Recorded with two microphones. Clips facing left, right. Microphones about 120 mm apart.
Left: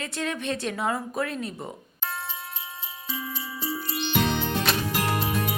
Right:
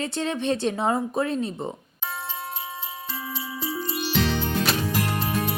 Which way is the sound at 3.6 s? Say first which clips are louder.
Right 1 dB; centre (ahead or behind).